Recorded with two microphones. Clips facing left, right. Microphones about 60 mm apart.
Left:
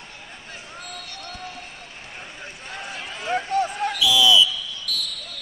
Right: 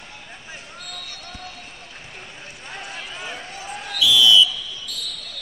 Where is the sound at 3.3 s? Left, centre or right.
Left.